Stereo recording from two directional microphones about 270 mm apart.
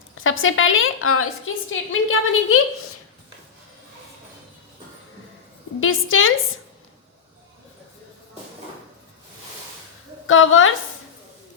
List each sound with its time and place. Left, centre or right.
0.2 s a woman's voice: left
5.8 s a woman's voice: left
10.2 s a woman's voice: left